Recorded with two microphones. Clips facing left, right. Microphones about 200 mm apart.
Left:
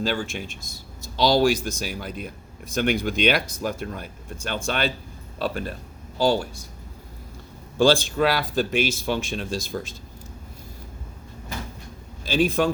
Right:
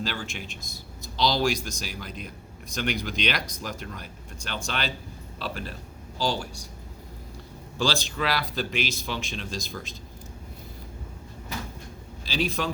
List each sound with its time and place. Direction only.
0.0 s speech: 50° left (ahead or behind)
7.8 s speech: 50° left (ahead or behind)
12.2 s speech: 50° left (ahead or behind)